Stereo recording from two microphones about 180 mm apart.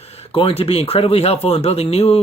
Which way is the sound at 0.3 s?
30° left (ahead or behind).